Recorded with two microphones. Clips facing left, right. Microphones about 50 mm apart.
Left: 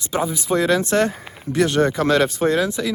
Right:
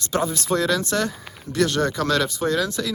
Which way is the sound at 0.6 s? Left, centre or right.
Left.